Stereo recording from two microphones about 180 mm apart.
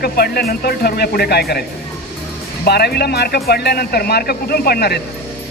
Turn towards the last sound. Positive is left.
turn(degrees=60)  # may be behind; listen again after turning